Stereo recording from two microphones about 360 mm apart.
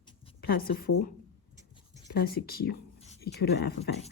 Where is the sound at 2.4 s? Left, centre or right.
Left.